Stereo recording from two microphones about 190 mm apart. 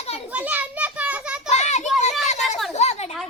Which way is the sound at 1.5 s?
40° left (ahead or behind).